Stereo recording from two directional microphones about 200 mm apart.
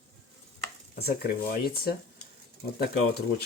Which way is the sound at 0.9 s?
50° left (ahead or behind).